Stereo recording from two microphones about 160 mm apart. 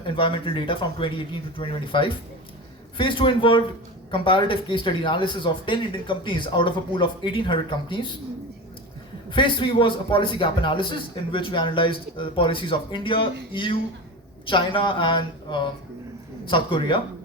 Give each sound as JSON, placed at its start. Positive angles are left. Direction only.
{"t": 0.0, "sound": "speech", "side_deg": 35}
{"t": 9.3, "sound": "speech", "side_deg": 30}